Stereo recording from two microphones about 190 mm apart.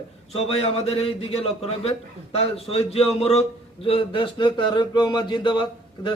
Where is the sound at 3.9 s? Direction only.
30° left (ahead or behind).